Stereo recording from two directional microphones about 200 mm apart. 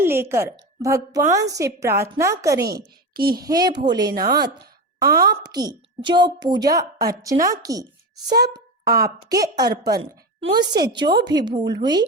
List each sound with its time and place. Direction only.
0.0 s a woman's voice: 10° right (ahead or behind)
2.6 s a woman's voice: 50° right (ahead or behind)
3.3 s a woman's voice: 20° right (ahead or behind)
8.3 s a sound: 20° right (ahead or behind)
9.0 s a woman's voice: 15° right (ahead or behind)